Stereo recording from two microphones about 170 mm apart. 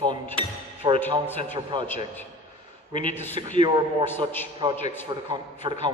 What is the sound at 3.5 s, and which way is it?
A man's voice, 30° right (ahead or behind).